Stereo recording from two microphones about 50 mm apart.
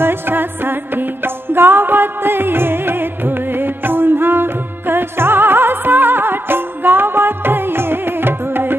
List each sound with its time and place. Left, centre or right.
0.0 s music: right